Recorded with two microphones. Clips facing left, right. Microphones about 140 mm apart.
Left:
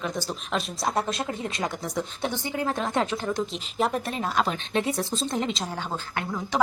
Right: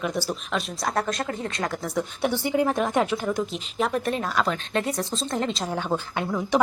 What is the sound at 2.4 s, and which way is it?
Speech, 15° right (ahead or behind).